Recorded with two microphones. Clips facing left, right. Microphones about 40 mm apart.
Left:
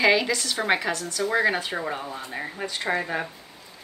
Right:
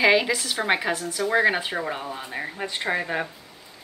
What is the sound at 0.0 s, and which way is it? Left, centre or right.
A woman's voice, centre.